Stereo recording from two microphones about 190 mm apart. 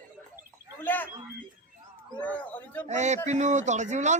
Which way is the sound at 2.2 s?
10° left (ahead or behind).